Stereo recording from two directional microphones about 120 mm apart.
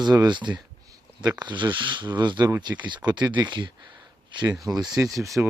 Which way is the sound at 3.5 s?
40° right (ahead or behind).